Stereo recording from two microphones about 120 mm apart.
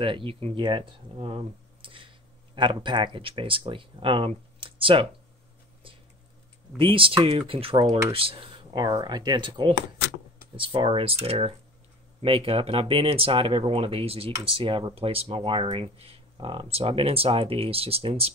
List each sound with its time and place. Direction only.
0.0 s speech: 45° right (ahead or behind)
0.6 s speech: 45° right (ahead or behind)
4.6 s a sound: 45° right (ahead or behind)
6.8 s speech: 45° right (ahead or behind)